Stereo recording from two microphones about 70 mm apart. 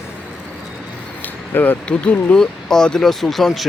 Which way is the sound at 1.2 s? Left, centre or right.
Left.